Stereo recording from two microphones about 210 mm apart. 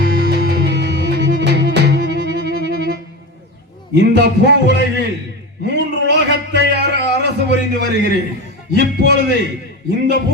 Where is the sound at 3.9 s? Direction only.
55° right (ahead or behind).